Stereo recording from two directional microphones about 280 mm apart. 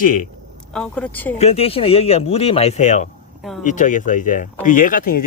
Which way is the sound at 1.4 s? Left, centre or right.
Left.